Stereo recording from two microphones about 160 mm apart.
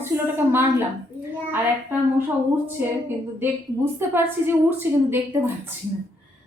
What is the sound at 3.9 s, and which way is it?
A woman's voice, 15° right (ahead or behind).